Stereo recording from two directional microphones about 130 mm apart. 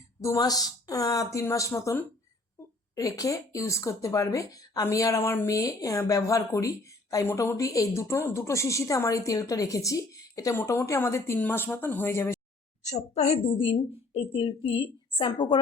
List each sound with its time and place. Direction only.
0.2 s speech: 25° left (ahead or behind)
12.8 s a woman's voice: 60° left (ahead or behind); by 15.6 s 40° left (ahead or behind)